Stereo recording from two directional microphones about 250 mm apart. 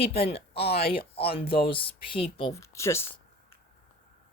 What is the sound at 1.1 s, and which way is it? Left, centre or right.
Speech, left.